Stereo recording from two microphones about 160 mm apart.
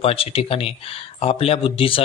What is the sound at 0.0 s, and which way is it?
A man's voice, 35° left (ahead or behind).